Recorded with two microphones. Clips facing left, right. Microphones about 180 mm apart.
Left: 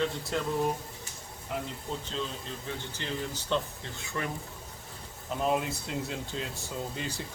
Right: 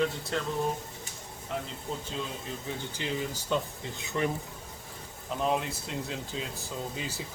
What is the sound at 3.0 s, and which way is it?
Speech, 15° right (ahead or behind).